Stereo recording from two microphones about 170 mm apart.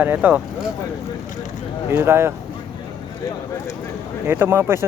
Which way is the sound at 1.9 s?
15° right (ahead or behind).